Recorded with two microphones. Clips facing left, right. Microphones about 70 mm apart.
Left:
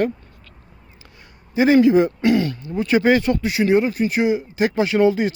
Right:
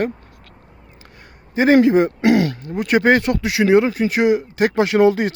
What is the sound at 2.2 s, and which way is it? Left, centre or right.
Speech, right.